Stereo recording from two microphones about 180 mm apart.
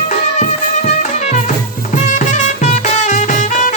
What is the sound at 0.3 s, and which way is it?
Music, 40° left (ahead or behind).